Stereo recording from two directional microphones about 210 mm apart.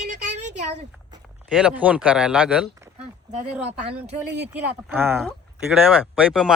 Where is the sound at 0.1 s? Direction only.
35° right (ahead or behind).